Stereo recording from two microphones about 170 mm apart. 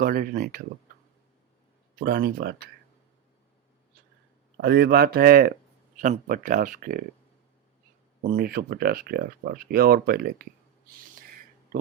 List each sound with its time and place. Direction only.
0.0 s speech: 55° right (ahead or behind)
2.0 s speech: 65° right (ahead or behind)
4.6 s speech: 70° right (ahead or behind)
6.0 s speech: 50° right (ahead or behind)
8.2 s speech: 55° right (ahead or behind)